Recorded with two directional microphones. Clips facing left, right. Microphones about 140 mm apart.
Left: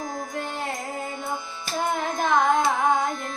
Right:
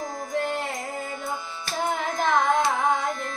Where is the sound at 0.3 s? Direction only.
Centre (ahead or behind).